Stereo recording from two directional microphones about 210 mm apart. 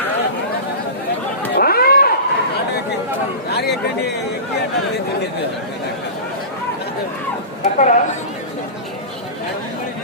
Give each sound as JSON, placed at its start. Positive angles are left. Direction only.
{"t": 1.5, "sound": "a sound", "side_deg": 45}
{"t": 3.5, "sound": "speech", "side_deg": 50}
{"t": 7.6, "sound": "a woman's voice", "side_deg": 35}